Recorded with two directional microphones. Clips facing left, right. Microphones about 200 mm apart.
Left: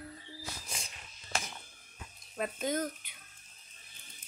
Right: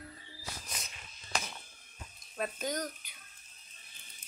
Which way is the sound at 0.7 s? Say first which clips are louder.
Left 1 dB; 25° left (ahead or behind).